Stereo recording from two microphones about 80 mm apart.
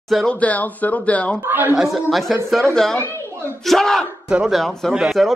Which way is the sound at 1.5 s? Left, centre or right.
Right.